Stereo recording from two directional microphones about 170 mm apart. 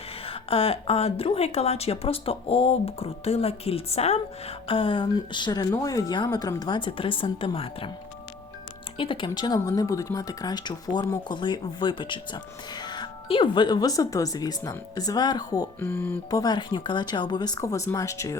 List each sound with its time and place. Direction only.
0.3 s speech: 35° left (ahead or behind)
9.0 s speech: 30° left (ahead or behind)
15.8 s speech: 10° left (ahead or behind)
16.4 s speech: 25° left (ahead or behind)